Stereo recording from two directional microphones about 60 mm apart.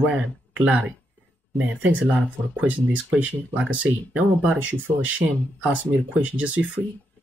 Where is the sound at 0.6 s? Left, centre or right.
Centre.